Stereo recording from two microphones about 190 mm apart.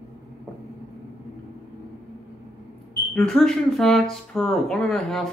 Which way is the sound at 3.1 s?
Centre (ahead or behind).